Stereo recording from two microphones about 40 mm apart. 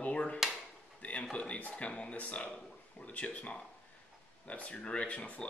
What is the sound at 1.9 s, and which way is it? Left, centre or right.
Speech, left.